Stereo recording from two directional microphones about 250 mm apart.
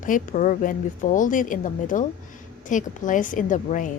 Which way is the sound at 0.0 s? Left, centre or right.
Left.